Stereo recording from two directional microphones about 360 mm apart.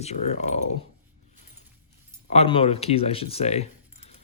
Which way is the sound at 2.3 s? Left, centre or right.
Centre.